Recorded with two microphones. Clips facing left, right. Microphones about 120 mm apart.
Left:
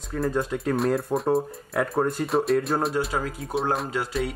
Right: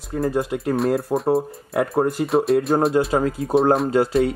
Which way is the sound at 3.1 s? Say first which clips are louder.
Right 8 dB; 35° right (ahead or behind).